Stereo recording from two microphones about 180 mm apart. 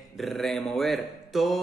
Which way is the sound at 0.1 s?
Centre (ahead or behind).